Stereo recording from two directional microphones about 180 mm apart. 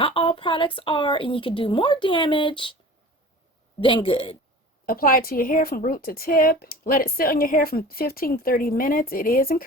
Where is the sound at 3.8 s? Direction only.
30° left (ahead or behind).